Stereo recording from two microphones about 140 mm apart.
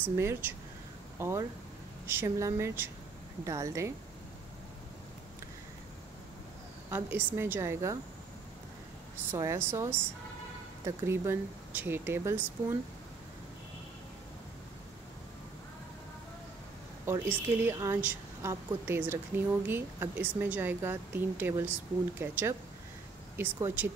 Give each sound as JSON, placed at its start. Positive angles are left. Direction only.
{"t": 0.1, "sound": "a woman's voice", "side_deg": -20}
{"t": 6.9, "sound": "a woman's voice", "side_deg": -15}
{"t": 9.3, "sound": "a woman's voice", "side_deg": -20}
{"t": 17.0, "sound": "a woman's voice", "side_deg": -15}